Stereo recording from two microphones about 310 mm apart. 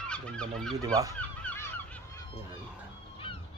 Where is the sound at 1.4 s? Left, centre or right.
Centre.